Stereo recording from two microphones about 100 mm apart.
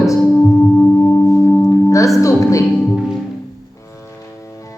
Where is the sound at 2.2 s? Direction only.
30° left (ahead or behind).